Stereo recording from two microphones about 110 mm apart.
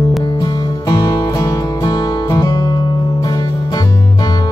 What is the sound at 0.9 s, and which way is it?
Music, 35° left (ahead or behind).